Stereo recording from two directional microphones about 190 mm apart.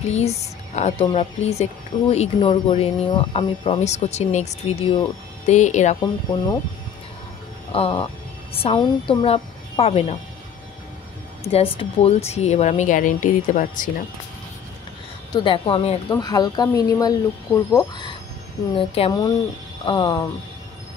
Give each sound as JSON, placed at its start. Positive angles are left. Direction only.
{"t": 0.1, "sound": "a woman's voice", "side_deg": 35}
{"t": 5.9, "sound": "speech", "side_deg": 20}
{"t": 7.7, "sound": "a woman's voice", "side_deg": 30}
{"t": 11.4, "sound": "a woman's voice", "side_deg": 30}
{"t": 15.3, "sound": "a woman's voice", "side_deg": 25}